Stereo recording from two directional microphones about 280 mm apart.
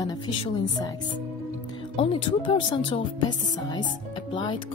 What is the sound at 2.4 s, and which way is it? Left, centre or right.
Speech, centre.